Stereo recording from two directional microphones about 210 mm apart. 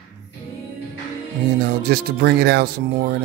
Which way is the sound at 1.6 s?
45° right (ahead or behind).